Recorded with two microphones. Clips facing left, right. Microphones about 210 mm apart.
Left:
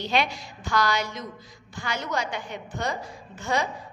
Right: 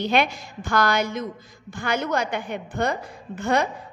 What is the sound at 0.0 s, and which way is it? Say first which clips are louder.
A woman's voice: right 4 dB; 55° right (ahead or behind).